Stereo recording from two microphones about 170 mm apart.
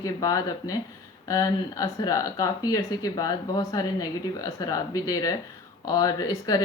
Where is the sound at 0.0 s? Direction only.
20° left (ahead or behind).